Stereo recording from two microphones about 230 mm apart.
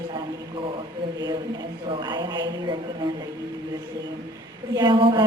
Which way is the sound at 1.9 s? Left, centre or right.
Centre.